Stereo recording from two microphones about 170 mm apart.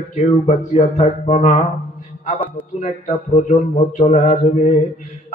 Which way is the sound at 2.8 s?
45° left (ahead or behind).